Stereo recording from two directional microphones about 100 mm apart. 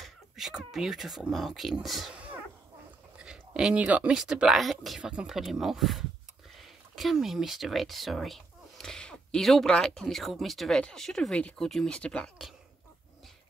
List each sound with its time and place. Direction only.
0.0 s speech: 5° right (ahead or behind)
3.2 s a sound: 5° right (ahead or behind)
4.2 s speech: 5° right (ahead or behind); by 12.3 s 10° left (ahead or behind)